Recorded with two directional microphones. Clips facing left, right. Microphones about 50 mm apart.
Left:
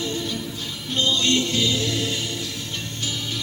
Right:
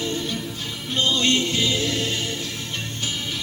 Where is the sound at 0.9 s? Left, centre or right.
Right.